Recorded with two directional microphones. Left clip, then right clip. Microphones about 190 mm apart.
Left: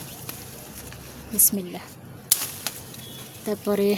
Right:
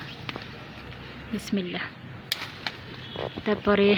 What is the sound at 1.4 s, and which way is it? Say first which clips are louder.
Speech: right 2 dB; 15° left (ahead or behind).